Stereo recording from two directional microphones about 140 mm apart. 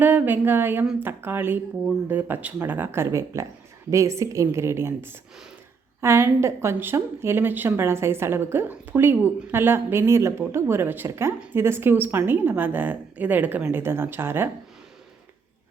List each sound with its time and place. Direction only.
0.0 s a woman's voice: 15° right (ahead or behind)
6.0 s a woman's voice: 20° right (ahead or behind)